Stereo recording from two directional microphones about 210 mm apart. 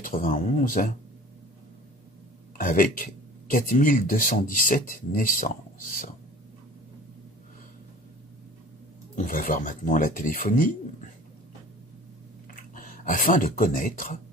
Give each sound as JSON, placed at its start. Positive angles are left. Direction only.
{"t": 0.0, "sound": "speech", "side_deg": 40}
{"t": 2.5, "sound": "speech", "side_deg": 40}
{"t": 9.1, "sound": "speech", "side_deg": 40}
{"t": 12.7, "sound": "speech", "side_deg": 40}